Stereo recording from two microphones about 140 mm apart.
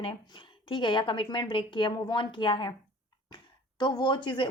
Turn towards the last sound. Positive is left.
turn(degrees=35)  # may be behind; listen again after turning